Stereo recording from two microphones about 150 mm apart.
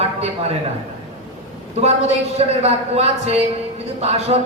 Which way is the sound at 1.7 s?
45° right (ahead or behind).